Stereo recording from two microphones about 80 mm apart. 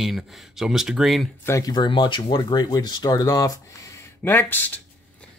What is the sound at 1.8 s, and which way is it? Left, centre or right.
Speech, left.